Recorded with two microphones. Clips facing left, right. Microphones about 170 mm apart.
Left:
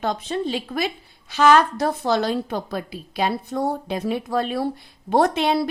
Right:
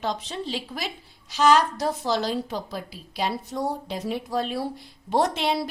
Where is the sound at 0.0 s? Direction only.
55° left (ahead or behind).